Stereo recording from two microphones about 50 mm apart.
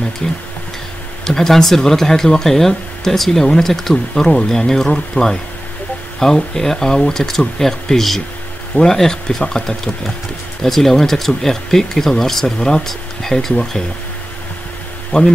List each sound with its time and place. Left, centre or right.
0.2 s speech: centre
15.1 s speech: left